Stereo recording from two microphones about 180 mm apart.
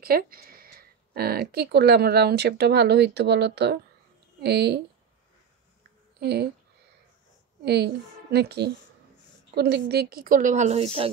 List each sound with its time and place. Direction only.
0.0 s speech: 55° right (ahead or behind)
6.1 s speech: 65° right (ahead or behind)
7.6 s a woman's voice: 65° right (ahead or behind); by 11.1 s 35° right (ahead or behind)